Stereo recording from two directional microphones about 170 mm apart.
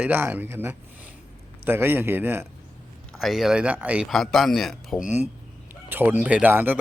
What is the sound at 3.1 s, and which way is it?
Speech, centre (ahead or behind).